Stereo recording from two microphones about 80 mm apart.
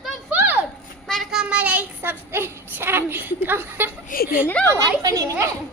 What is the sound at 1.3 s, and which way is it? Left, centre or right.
Child singing, centre.